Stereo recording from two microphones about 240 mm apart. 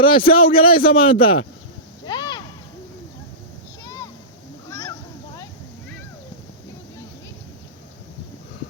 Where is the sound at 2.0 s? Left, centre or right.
Centre.